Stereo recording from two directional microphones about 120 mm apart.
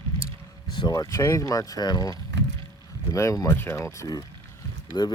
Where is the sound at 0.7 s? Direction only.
35° left (ahead or behind).